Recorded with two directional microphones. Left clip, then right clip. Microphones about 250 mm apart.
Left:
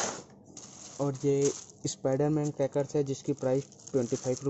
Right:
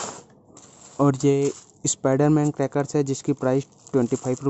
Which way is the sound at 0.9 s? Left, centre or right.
Right.